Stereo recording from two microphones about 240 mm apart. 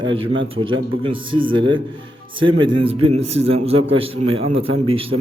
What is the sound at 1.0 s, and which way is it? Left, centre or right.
A man's voice, right.